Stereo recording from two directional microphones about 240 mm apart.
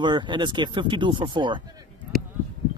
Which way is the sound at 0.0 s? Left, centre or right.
Centre.